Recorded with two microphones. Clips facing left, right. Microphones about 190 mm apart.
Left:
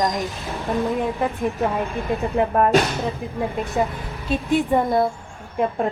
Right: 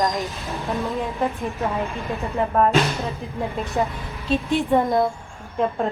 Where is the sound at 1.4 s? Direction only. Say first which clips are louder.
Left 3 dB; 15° left (ahead or behind).